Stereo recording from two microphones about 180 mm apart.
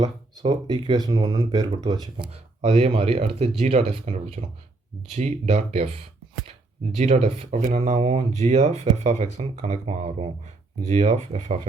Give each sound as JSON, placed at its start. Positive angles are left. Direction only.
{"t": 0.5, "sound": "speech", "side_deg": -20}
{"t": 2.3, "sound": "speech", "side_deg": -35}
{"t": 6.9, "sound": "speech", "side_deg": -35}